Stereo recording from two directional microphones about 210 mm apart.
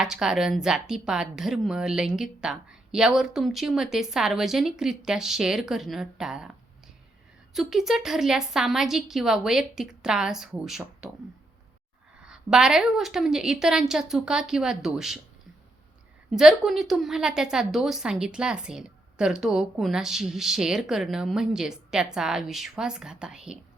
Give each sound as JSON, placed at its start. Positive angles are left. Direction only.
{"t": 0.0, "sound": "a woman's voice", "side_deg": 0}
{"t": 12.2, "sound": "a woman's voice", "side_deg": -5}
{"t": 16.3, "sound": "a woman's voice", "side_deg": 0}